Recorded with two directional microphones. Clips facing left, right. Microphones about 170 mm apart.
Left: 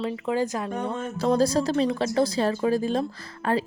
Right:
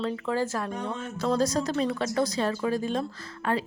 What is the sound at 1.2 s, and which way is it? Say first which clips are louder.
Speech: left 4 dB; 30° left (ahead or behind).